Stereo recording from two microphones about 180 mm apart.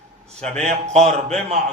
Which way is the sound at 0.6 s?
40° right (ahead or behind).